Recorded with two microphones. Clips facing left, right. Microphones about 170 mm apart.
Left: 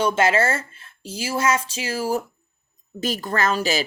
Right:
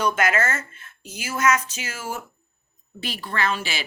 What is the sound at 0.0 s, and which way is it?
Speech, 30° left (ahead or behind).